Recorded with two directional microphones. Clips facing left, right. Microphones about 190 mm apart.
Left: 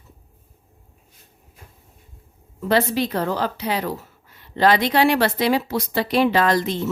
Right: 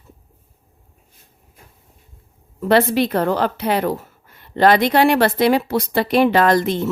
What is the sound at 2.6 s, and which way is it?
A woman's voice, 65° right (ahead or behind).